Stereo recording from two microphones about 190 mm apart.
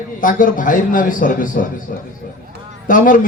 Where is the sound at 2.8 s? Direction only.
45° left (ahead or behind).